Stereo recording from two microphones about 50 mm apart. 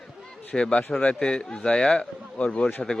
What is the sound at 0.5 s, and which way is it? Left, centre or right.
Speech, centre.